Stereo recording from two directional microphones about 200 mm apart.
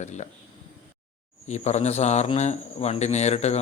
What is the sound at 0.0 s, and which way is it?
Speech, 35° left (ahead or behind).